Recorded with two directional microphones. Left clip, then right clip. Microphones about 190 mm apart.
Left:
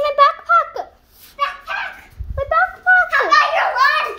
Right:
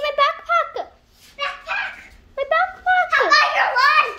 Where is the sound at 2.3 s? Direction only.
10° right (ahead or behind).